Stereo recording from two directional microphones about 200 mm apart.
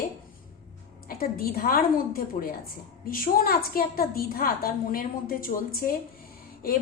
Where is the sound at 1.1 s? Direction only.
45° left (ahead or behind).